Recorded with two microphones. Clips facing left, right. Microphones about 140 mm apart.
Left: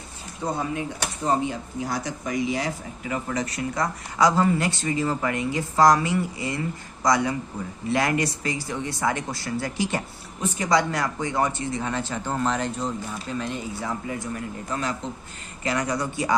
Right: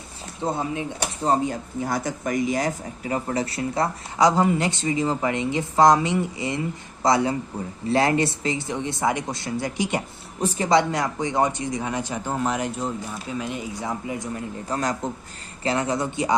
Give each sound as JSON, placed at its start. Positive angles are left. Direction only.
{"t": 0.4, "sound": "speech", "side_deg": -25}
{"t": 1.3, "sound": "speech", "side_deg": -45}
{"t": 10.4, "sound": "speech", "side_deg": -35}
{"t": 14.7, "sound": "a man's voice", "side_deg": -40}
{"t": 15.6, "sound": "speech", "side_deg": -30}